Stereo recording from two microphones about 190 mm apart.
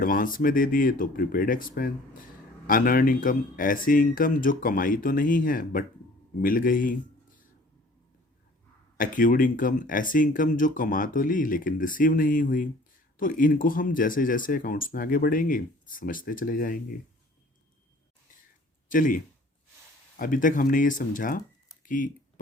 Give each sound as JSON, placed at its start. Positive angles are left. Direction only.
{"t": 0.0, "sound": "speech", "side_deg": 45}
{"t": 9.0, "sound": "speech", "side_deg": 45}
{"t": 18.9, "sound": "speech", "side_deg": 45}